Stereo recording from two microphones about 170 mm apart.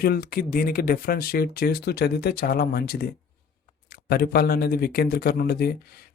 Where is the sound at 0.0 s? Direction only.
65° left (ahead or behind).